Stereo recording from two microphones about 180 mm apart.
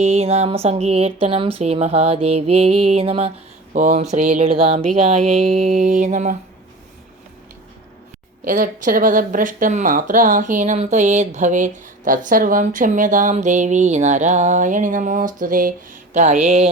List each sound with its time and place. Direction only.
0.0 s speech: 35° right (ahead or behind)
5.5 s speech: 45° right (ahead or behind)
8.4 s speech: 50° right (ahead or behind)